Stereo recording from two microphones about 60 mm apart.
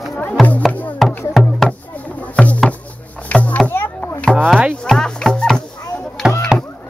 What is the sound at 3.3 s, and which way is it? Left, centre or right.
Rowboat, left.